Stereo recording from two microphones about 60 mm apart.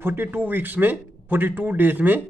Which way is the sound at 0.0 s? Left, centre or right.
Right.